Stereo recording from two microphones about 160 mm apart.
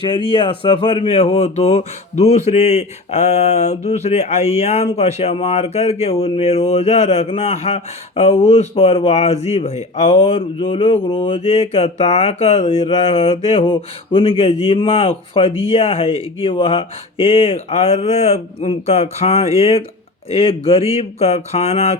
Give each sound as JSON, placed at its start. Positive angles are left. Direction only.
{"t": 0.3, "sound": "speech", "side_deg": 30}